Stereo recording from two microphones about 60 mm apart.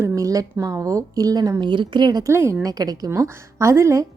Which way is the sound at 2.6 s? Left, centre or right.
Right.